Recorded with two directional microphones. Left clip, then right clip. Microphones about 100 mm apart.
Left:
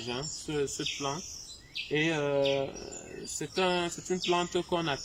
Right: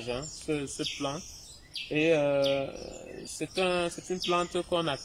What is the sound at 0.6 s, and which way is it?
Speech, 15° right (ahead or behind).